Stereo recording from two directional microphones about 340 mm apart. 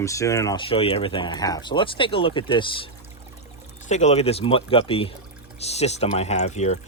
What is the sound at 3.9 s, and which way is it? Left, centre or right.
Speech, centre.